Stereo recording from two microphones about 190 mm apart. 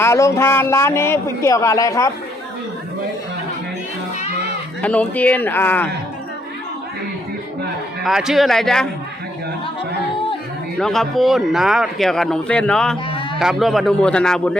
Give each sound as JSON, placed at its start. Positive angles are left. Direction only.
{"t": 0.0, "sound": "a man's voice", "side_deg": 15}
{"t": 4.8, "sound": "a man's voice", "side_deg": 10}
{"t": 8.0, "sound": "speech", "side_deg": 0}
{"t": 10.8, "sound": "speech", "side_deg": 0}